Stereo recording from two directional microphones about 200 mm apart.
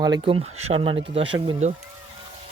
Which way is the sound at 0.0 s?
25° right (ahead or behind).